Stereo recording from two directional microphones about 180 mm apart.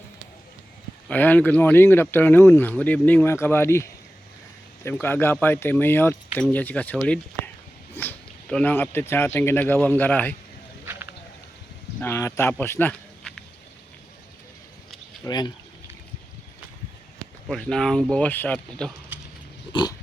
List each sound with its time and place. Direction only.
1.0 s speech: 10° left (ahead or behind)
11.9 s speech: 15° left (ahead or behind)
15.2 s speech: 25° left (ahead or behind)
17.5 s speech: 5° left (ahead or behind)
19.7 s pig: 25° left (ahead or behind)